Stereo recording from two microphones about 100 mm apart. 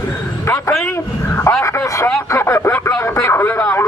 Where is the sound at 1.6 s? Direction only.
30° left (ahead or behind).